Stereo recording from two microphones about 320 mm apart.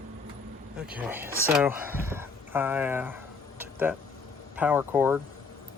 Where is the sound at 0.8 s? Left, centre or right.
Centre.